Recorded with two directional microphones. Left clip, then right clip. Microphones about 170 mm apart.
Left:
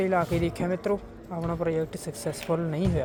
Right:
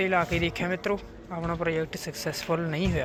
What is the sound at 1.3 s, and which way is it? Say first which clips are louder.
Speech: even; 10° left (ahead or behind).